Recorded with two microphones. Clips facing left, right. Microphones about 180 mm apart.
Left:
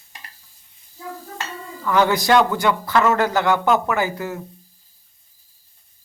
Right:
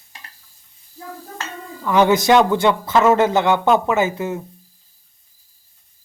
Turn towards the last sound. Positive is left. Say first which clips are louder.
# right 4 dB
turn(degrees=-20)  # may be behind; listen again after turning